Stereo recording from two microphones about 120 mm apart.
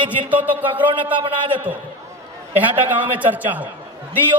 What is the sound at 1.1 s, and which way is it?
Speech, 45° right (ahead or behind).